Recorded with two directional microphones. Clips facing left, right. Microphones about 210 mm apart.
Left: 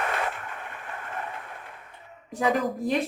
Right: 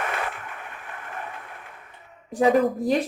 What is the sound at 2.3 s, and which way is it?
Speech, 35° right (ahead or behind).